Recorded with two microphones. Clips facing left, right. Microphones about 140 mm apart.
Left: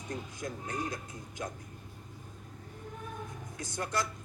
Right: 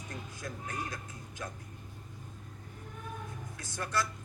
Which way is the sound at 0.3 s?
20° left (ahead or behind).